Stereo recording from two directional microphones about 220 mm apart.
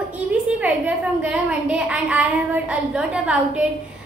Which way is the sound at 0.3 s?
5° right (ahead or behind).